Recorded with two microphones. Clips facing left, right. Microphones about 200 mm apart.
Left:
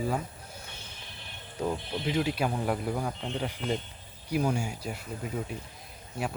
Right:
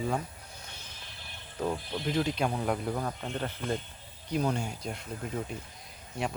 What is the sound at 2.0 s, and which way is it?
Speech, 5° left (ahead or behind).